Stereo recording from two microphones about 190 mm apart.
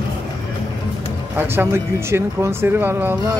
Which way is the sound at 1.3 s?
10° right (ahead or behind).